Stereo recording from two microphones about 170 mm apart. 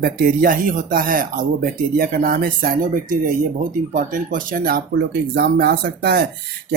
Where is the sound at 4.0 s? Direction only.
55° right (ahead or behind).